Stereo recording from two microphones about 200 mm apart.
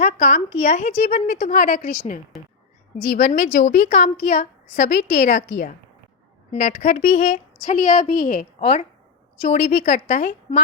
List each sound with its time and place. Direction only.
0.0 s a woman's voice: 35° left (ahead or behind)